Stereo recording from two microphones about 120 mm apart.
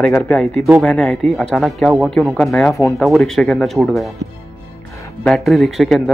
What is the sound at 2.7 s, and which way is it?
Speech, 30° left (ahead or behind).